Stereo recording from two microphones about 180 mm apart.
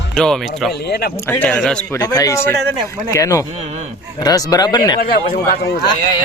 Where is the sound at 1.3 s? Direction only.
10° left (ahead or behind).